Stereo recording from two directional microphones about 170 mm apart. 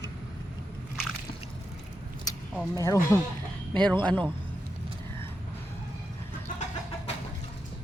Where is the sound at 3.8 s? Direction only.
10° left (ahead or behind).